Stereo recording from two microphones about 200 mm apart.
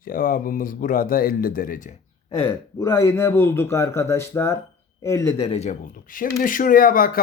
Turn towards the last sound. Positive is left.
turn(degrees=45)  # may be behind; listen again after turning